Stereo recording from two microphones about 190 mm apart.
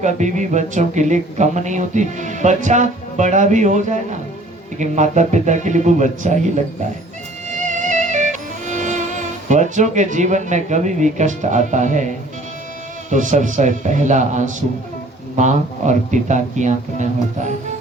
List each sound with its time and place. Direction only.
0.0 s speech: 40° right (ahead or behind)
7.7 s music: 40° right (ahead or behind)
13.1 s speech: 40° right (ahead or behind)